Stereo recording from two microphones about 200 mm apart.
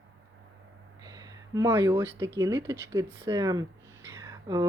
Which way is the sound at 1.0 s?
20° right (ahead or behind).